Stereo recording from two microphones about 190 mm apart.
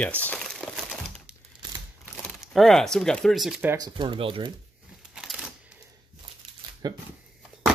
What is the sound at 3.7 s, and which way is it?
Speech, 25° right (ahead or behind).